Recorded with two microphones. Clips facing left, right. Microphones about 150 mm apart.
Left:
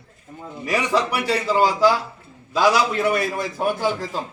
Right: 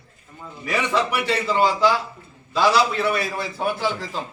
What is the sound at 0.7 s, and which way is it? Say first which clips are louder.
Speech: left 1 dB; 10° left (ahead or behind).